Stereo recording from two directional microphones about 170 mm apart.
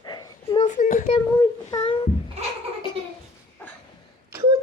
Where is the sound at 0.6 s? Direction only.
45° left (ahead or behind).